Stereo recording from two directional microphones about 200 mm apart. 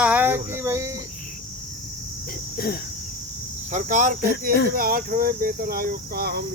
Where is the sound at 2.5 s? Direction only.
50° left (ahead or behind).